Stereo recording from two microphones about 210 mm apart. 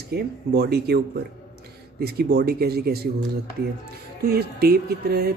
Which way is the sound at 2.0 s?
50° right (ahead or behind).